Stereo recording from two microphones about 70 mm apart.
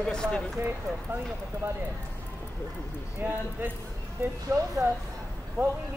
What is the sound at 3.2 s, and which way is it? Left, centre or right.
Speech, right.